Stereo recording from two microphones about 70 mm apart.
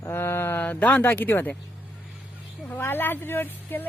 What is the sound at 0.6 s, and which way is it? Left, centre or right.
Speech, left.